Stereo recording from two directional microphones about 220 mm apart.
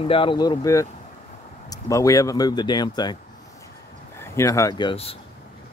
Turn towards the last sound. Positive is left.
turn(degrees=25)  # may be behind; listen again after turning